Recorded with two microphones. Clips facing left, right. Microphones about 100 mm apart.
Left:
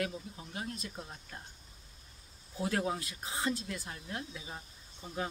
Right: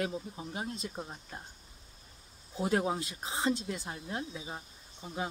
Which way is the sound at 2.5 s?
25° right (ahead or behind).